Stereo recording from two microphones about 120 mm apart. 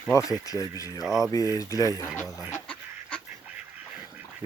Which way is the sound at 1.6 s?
30° left (ahead or behind).